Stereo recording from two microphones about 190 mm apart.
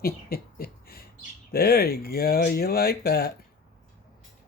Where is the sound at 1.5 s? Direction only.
55° left (ahead or behind).